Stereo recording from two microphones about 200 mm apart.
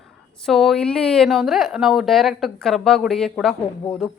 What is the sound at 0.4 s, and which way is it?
A woman's voice, centre (ahead or behind).